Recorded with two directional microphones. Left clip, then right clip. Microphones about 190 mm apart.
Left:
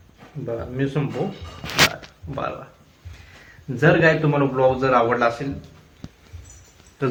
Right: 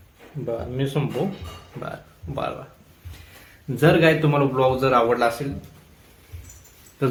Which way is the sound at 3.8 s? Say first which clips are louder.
Left 1 dB; 25° right (ahead or behind).